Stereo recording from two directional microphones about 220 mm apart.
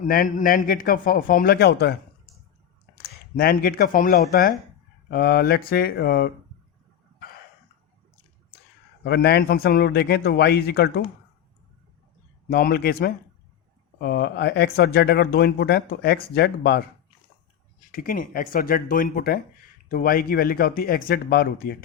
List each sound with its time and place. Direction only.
0.0 s a man's voice: 40° left (ahead or behind)
3.3 s a man's voice: 45° left (ahead or behind)
9.0 s speech: 50° left (ahead or behind)
12.5 s speech: 45° left (ahead or behind)
17.9 s a man's voice: 40° left (ahead or behind)